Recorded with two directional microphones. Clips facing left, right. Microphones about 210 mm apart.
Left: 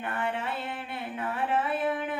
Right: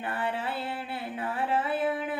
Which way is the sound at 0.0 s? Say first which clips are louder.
Even; 30° right (ahead or behind).